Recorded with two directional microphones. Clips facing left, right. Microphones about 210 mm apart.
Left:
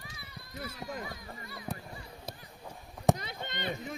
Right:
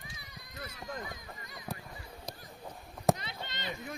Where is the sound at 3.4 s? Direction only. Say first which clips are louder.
Left 7 dB; 55° left (ahead or behind).